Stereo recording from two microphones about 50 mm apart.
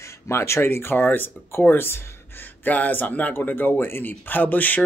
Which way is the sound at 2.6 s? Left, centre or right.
Left.